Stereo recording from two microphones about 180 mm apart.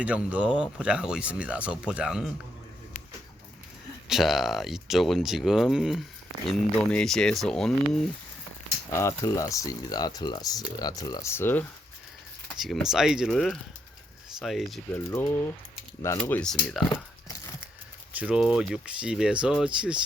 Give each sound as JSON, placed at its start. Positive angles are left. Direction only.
{"t": 0.0, "sound": "speech", "side_deg": -5}
{"t": 4.1, "sound": "speech", "side_deg": 0}
{"t": 8.9, "sound": "speech", "side_deg": 15}
{"t": 12.5, "sound": "speech", "side_deg": 0}
{"t": 14.9, "sound": "speech", "side_deg": 10}
{"t": 16.9, "sound": "crumpling", "side_deg": 20}
{"t": 18.1, "sound": "speech", "side_deg": -10}